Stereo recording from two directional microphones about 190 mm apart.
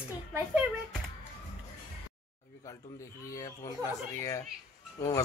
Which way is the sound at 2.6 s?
15° left (ahead or behind).